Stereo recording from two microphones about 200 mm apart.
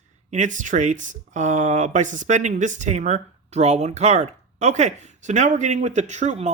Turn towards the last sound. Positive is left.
turn(degrees=-35)  # may be behind; listen again after turning